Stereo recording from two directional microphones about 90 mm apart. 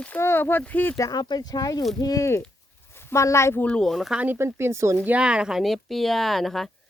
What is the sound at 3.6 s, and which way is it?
Speech, 15° left (ahead or behind).